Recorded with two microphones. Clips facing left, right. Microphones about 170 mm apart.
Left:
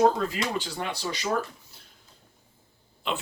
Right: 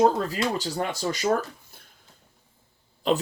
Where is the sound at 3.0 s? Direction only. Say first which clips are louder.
Right 8 dB; 40° right (ahead or behind).